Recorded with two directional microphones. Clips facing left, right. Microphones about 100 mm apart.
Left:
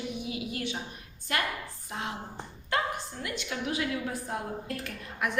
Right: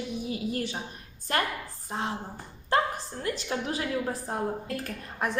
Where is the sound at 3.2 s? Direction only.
35° right (ahead or behind).